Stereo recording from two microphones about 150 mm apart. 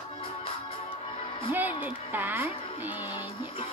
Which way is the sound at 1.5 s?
10° right (ahead or behind).